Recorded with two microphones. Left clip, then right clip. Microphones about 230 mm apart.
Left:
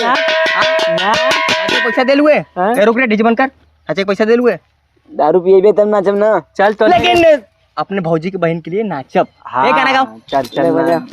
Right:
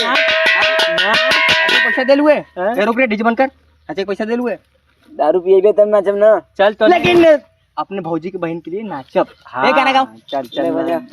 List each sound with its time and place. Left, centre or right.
0.2 s music: centre
2.0 s speech: left